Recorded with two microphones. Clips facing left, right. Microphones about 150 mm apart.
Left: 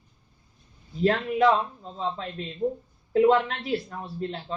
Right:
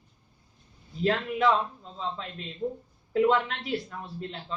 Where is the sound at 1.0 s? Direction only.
40° left (ahead or behind).